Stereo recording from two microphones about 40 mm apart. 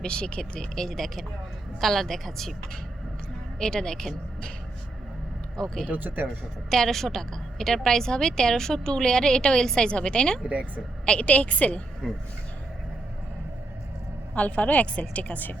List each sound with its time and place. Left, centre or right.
0.0 s a woman's voice: left; by 2.6 s centre
3.6 s a woman's voice: centre
5.6 s a woman's voice: centre
5.9 s speech: right
6.7 s a woman's voice: centre
11.3 s a woman's voice: left
12.0 s speech: centre
14.3 s a woman's voice: left